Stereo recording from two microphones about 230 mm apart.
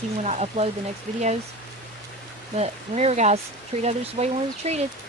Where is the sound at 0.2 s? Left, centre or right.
Right.